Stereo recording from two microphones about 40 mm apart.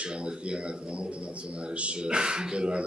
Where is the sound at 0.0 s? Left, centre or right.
Right.